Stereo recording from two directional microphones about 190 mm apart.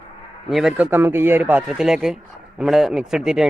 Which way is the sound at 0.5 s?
5° right (ahead or behind).